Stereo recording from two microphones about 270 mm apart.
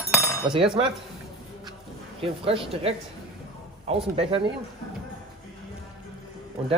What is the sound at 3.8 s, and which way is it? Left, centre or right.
Speech, right.